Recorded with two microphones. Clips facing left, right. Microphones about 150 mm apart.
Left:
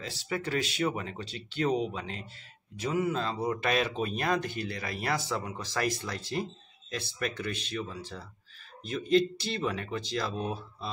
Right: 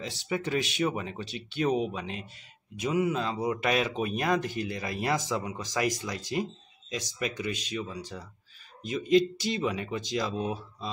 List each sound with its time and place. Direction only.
0.0 s speech: 15° right (ahead or behind)